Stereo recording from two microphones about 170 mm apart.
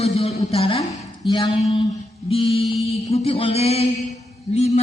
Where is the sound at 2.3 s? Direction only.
35° left (ahead or behind).